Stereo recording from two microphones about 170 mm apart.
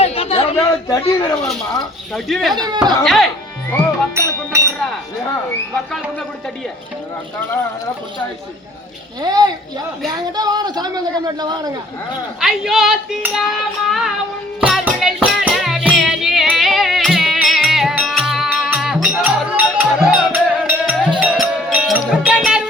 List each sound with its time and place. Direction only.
0.0 s a sound: 35° left (ahead or behind)
0.5 s a sound: 20° left (ahead or behind)
1.8 s child singing: centre (ahead or behind)
2.6 s a man's voice: 25° right (ahead or behind)
3.0 s child singing: centre (ahead or behind)
4.1 s music: 15° right (ahead or behind)
9.2 s a man's voice: 25° right (ahead or behind)
12.4 s child singing: centre (ahead or behind)
14.6 s music: centre (ahead or behind)